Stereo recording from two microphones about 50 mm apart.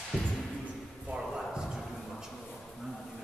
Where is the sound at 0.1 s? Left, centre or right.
Centre.